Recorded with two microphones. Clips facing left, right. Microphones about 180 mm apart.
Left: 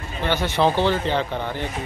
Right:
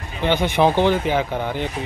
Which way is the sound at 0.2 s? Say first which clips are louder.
Right 3 dB; 15° right (ahead or behind).